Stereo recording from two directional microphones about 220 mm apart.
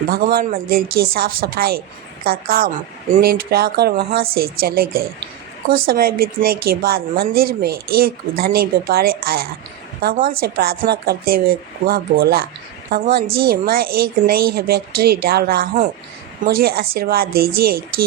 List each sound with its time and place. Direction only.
0.1 s a woman's voice: 45° right (ahead or behind)